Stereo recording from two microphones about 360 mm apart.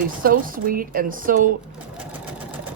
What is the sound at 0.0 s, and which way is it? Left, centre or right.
Speech, right.